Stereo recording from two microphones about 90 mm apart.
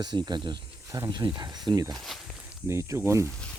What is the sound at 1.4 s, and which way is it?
Speech, 50° right (ahead or behind).